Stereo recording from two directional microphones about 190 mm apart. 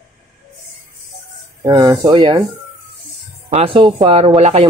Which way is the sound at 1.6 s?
20° right (ahead or behind).